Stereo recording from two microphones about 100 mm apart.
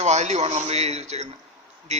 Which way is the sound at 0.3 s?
90° right.